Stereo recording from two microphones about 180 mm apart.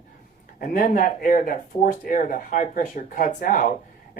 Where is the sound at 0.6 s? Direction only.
50° left (ahead or behind).